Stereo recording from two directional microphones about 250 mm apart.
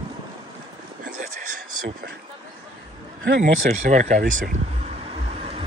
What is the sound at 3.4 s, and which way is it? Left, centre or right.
Speech, right.